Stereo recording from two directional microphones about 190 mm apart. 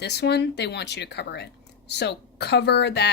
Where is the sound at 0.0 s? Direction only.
60° left (ahead or behind).